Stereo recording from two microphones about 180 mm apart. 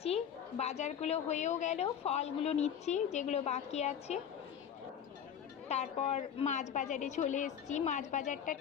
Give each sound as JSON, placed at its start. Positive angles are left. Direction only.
{"t": 0.0, "sound": "a woman's voice", "side_deg": 35}
{"t": 5.6, "sound": "a woman's voice", "side_deg": 35}